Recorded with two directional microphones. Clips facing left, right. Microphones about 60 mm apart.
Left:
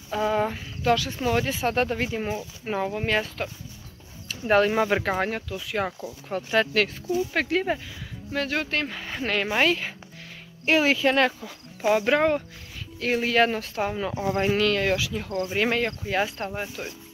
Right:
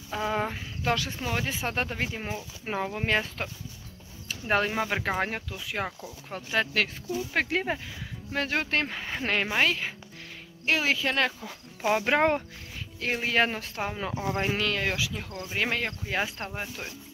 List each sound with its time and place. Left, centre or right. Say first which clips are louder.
0.1 s speech: left 5 dB; centre
0.8 s speech: left 5 dB; right
1.2 s speech: left 6 dB; centre
2.7 s speech: left 2 dB; centre
4.5 s speech: left 6 dB; centre
4.7 s speech: left 6 dB; centre
5.0 s speech: left 3 dB; centre
5.9 s speech: left 5 dB; centre
7.3 s speech: left 3 dB; centre
8.8 s speech: left 1 dB; centre
9.5 s speech: left 3 dB; centre
10.6 s speech: left 5 dB; centre
12.2 s speech: left 2 dB; right
13.0 s speech: left 4 dB; centre